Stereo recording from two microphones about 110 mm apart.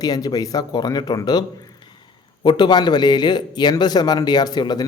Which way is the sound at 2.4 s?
45° left (ahead or behind).